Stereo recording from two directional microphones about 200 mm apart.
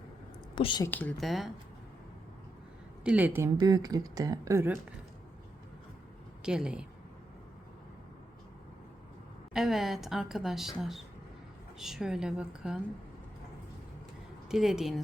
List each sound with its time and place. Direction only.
0.5 s a woman's voice: 25° left (ahead or behind)
0.9 s a woman's voice: 10° left (ahead or behind)
3.0 s speech: 5° right (ahead or behind)
6.4 s a woman's voice: 5° right (ahead or behind)
9.5 s a woman's voice: centre (ahead or behind)
14.5 s a woman's voice: centre (ahead or behind)